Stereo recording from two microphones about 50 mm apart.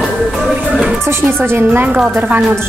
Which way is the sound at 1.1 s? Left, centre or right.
Right.